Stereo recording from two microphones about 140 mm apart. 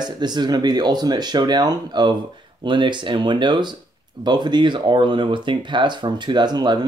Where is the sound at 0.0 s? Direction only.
30° right (ahead or behind).